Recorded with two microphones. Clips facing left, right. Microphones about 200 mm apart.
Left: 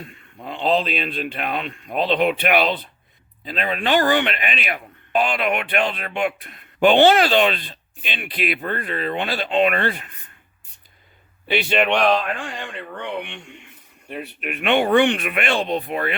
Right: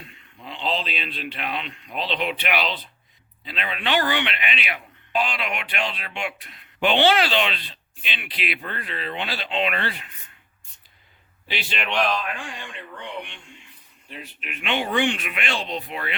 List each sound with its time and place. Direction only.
0.0 s speech: 50° left (ahead or behind)
11.4 s speech: 55° left (ahead or behind)